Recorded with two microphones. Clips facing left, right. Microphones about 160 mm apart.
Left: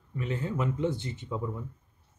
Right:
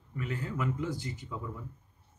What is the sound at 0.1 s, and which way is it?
Speech, 25° left (ahead or behind).